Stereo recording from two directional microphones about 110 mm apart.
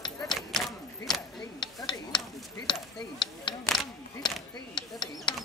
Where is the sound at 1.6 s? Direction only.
45° left (ahead or behind).